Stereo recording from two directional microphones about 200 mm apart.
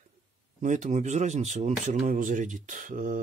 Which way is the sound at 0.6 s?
40° right (ahead or behind).